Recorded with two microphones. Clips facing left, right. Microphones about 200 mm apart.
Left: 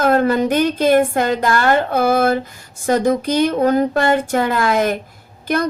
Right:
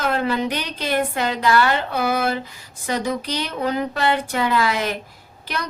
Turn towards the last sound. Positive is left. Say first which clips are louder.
# left 10 dB
turn(degrees=50)  # may be behind; listen again after turning